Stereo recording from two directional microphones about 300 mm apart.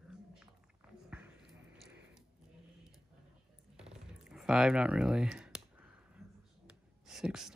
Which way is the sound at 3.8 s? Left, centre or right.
Centre.